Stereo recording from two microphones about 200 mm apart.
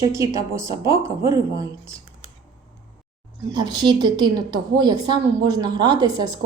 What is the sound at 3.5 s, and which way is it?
A woman's voice, 20° right (ahead or behind).